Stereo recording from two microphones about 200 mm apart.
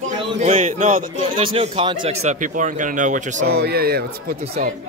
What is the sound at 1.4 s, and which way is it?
Speech, 25° right (ahead or behind).